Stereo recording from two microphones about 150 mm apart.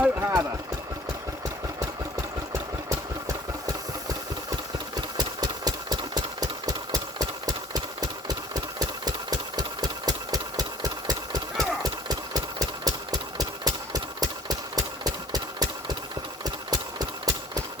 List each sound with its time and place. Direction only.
0.0 s a sound: 15° right (ahead or behind)
2.5 s engine: 20° right (ahead or behind)
4.9 s engine: 25° right (ahead or behind)